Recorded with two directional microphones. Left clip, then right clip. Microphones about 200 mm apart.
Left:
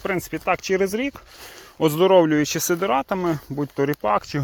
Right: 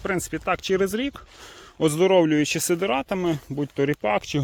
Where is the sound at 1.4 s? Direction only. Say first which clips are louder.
Left 2 dB; 55° left (ahead or behind).